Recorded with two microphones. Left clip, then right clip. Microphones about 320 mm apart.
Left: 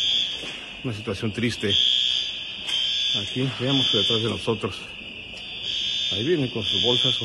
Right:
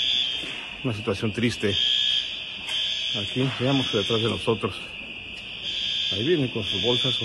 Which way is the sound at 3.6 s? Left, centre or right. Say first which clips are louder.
Left 5 dB; centre.